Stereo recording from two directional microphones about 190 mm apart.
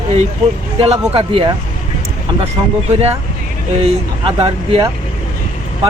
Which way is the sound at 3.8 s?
30° right (ahead or behind).